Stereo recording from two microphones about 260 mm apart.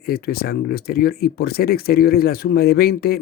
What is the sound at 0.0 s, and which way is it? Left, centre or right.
Speech, left.